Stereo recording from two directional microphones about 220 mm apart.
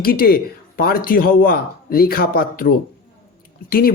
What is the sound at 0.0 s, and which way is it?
A man's voice, 40° left (ahead or behind).